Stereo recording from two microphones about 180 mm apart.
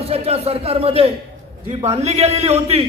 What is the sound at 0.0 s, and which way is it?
A man's voice, 35° right (ahead or behind).